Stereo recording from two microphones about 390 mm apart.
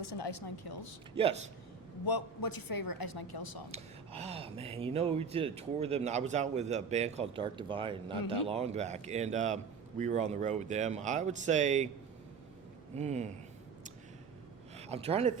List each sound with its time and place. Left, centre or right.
0.0 s speech: left
1.1 s speech: centre
2.0 s a woman's voice: left
3.7 s speech: centre
13.0 s speech: centre
14.8 s speech: centre